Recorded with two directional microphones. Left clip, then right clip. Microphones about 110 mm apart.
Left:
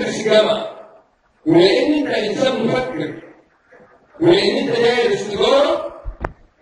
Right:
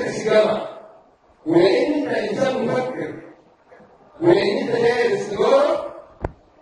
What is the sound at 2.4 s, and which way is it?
Speech, 40° left (ahead or behind).